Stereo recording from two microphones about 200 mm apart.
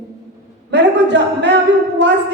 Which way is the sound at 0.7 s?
60° right (ahead or behind).